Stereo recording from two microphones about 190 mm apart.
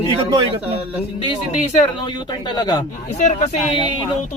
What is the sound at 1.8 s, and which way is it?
A man's voice, 25° left (ahead or behind).